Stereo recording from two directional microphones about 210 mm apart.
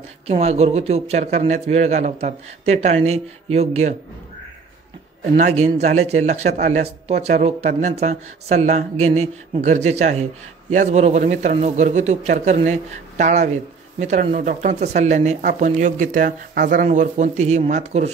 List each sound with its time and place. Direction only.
0.3 s a man's voice: 30° right (ahead or behind)
5.3 s a man's voice: 30° right (ahead or behind)